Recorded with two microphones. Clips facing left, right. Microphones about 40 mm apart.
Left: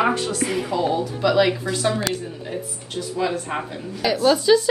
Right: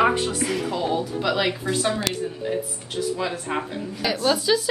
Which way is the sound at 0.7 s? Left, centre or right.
Centre.